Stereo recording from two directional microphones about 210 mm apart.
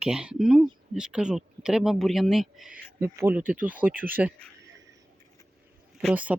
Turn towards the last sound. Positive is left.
turn(degrees=-5)  # may be behind; listen again after turning